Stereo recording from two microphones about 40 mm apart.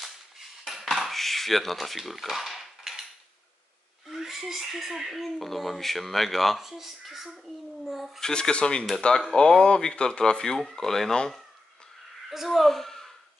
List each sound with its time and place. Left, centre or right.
0.7 s dishes: centre
4.1 s speech: centre
8.2 s speech: left
12.3 s speech: centre